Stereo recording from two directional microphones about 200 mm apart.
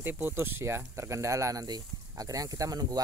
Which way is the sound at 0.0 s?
10° right (ahead or behind).